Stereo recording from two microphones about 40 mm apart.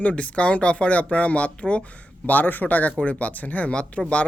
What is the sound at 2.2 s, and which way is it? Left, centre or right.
Speech, left.